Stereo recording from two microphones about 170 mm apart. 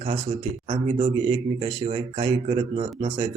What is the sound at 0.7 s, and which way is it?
Speech, 30° right (ahead or behind).